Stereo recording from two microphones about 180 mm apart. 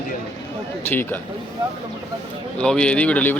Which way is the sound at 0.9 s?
10° left (ahead or behind).